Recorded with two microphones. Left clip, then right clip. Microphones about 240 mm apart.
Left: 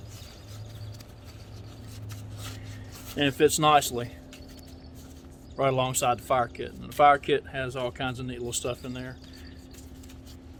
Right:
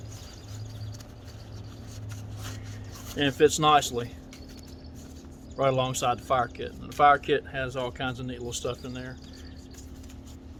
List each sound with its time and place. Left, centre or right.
3.2 s speech: left
5.5 s speech: left